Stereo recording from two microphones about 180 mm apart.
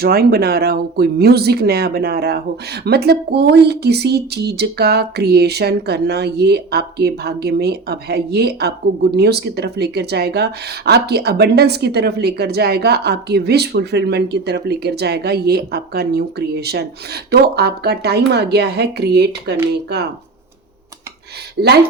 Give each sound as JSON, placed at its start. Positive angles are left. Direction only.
{"t": 0.0, "sound": "speech", "side_deg": -60}